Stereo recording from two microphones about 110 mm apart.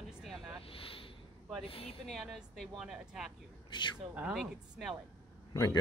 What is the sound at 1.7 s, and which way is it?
Speech, 60° left (ahead or behind).